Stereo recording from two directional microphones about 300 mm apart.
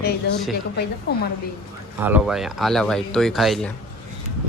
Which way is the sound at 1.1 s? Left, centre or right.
Left.